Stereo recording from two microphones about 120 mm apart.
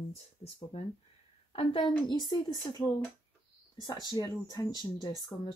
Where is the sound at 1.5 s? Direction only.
45° left (ahead or behind).